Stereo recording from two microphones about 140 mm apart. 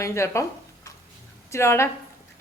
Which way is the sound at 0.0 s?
20° left (ahead or behind).